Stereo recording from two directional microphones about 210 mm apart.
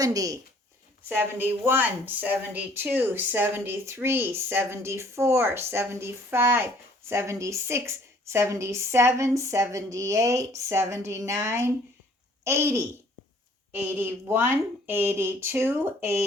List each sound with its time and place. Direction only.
0.0 s speech: 15° right (ahead or behind)